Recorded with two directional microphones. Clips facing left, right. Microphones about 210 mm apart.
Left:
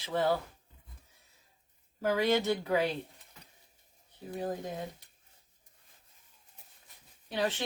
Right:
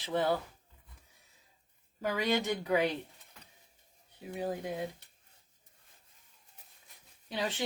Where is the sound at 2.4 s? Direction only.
15° right (ahead or behind).